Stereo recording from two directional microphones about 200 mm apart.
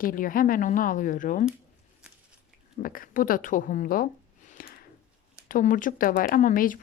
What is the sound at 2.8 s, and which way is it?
A woman's voice, 45° left (ahead or behind).